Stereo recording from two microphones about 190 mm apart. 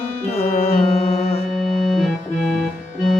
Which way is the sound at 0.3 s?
35° left (ahead or behind).